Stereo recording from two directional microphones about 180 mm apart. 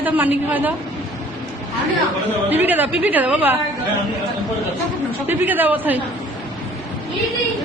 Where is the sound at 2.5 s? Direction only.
10° right (ahead or behind).